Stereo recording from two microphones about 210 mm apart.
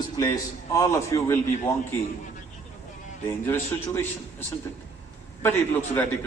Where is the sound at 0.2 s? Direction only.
15° left (ahead or behind).